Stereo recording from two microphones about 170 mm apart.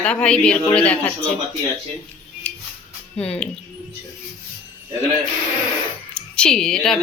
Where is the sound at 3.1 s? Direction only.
5° left (ahead or behind).